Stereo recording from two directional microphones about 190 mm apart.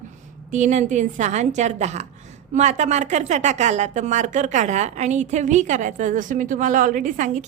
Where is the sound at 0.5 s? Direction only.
40° right (ahead or behind).